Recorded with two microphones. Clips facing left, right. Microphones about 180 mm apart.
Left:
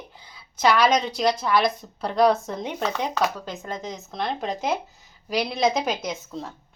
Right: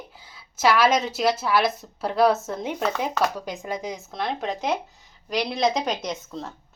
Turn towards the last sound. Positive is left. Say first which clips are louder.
# even
turn(degrees=0)  # may be behind; listen again after turning